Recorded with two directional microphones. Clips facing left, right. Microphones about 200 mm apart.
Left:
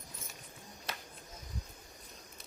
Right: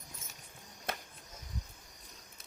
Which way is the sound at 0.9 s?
50° right (ahead or behind).